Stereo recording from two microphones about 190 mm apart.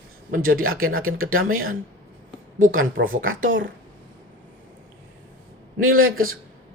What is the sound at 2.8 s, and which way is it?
Speech, 90° right.